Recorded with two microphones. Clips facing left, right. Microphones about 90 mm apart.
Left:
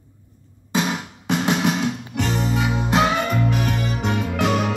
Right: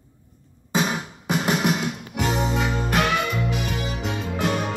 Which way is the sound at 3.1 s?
40° left (ahead or behind).